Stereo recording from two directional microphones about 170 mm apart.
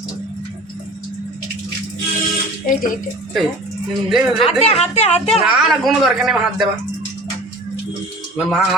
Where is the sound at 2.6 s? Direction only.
55° left (ahead or behind).